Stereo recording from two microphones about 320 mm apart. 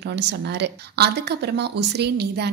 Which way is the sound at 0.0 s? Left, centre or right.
Right.